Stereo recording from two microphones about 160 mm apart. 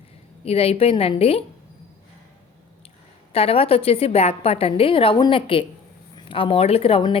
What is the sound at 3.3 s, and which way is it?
A woman's voice, 35° left (ahead or behind).